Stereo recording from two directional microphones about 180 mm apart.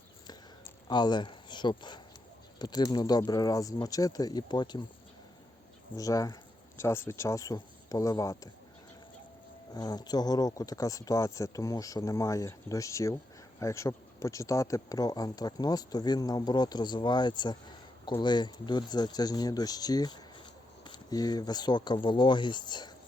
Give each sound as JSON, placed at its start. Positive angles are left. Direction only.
{"t": 0.3, "sound": "a sound", "side_deg": 25}
{"t": 2.6, "sound": "speech", "side_deg": 20}
{"t": 6.0, "sound": "speech", "side_deg": 20}
{"t": 9.7, "sound": "speech", "side_deg": 20}